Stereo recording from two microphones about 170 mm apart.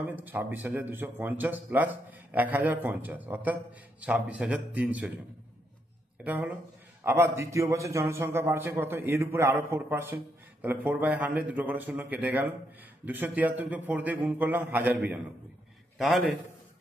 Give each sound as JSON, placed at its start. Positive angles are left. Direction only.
{"t": 0.0, "sound": "a man's voice", "side_deg": -10}
{"t": 6.2, "sound": "a man's voice", "side_deg": -10}
{"t": 16.0, "sound": "a man's voice", "side_deg": 0}